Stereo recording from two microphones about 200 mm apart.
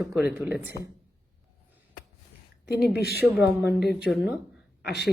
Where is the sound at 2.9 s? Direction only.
50° left (ahead or behind).